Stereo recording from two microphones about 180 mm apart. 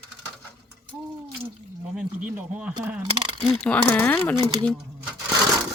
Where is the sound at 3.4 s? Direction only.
5° left (ahead or behind).